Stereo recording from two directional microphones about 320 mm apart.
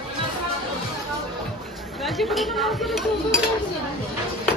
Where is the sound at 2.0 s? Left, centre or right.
Centre.